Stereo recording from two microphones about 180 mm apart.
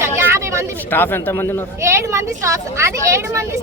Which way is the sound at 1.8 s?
15° right (ahead or behind).